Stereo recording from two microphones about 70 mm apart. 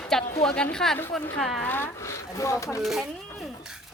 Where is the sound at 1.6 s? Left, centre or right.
Left.